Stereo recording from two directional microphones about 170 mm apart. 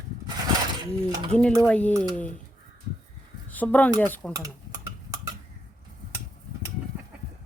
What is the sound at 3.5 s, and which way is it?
Speech, 10° left (ahead or behind).